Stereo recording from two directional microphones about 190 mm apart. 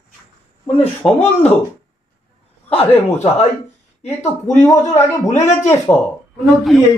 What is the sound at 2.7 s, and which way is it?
Speech, 35° left (ahead or behind).